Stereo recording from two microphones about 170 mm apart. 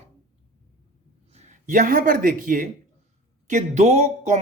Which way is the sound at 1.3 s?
45° right (ahead or behind).